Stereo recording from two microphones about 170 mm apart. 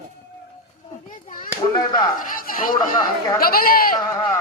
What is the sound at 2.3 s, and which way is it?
Speech, 55° left (ahead or behind).